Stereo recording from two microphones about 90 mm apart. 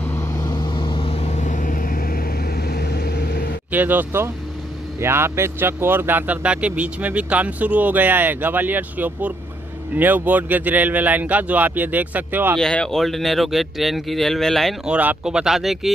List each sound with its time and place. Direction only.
0.4 s vehicle: 55° left (ahead or behind); by 1.1 s 70° left (ahead or behind)
3.7 s speech: 20° right (ahead or behind)
12.5 s speech: 10° left (ahead or behind)
14.9 s speech: 20° right (ahead or behind)
15.2 s speech: 5° right (ahead or behind)